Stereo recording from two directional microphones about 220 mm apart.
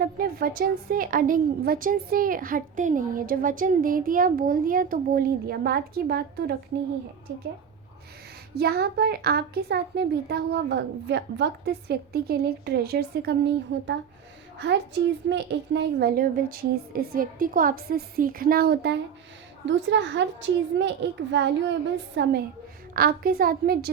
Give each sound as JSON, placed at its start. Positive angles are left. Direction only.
{"t": 0.0, "sound": "a woman's voice", "side_deg": -40}
{"t": 8.5, "sound": "a woman's voice", "side_deg": -45}